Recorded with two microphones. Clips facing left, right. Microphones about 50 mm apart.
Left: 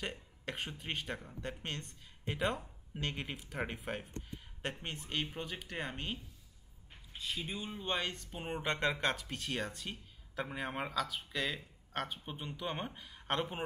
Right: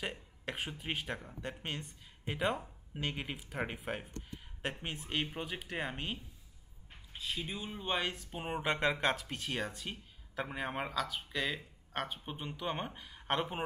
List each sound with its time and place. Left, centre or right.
0.0 s speech: centre
7.2 s speech: centre